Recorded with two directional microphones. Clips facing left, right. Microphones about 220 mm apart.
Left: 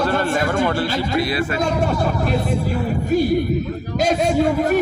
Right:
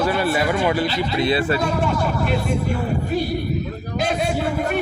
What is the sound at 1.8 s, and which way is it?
Speech, 40° left (ahead or behind).